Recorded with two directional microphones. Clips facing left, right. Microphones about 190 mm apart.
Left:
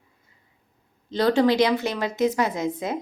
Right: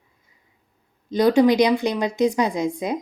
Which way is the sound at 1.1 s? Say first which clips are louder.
Right 4 dB; 15° right (ahead or behind).